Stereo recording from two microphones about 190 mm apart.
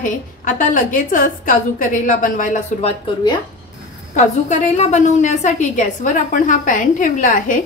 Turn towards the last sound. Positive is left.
turn(degrees=45)  # may be behind; listen again after turning